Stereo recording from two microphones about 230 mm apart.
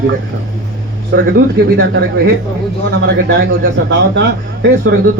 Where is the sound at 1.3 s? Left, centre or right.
Right.